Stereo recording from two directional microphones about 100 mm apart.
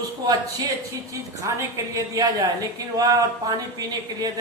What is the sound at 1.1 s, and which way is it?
Speech, 30° right (ahead or behind).